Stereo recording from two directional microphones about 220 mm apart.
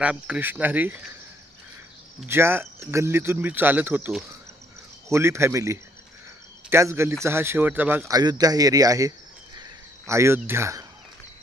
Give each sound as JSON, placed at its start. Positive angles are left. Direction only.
{"t": 0.0, "sound": "speech", "side_deg": -5}
{"t": 2.2, "sound": "speech", "side_deg": -10}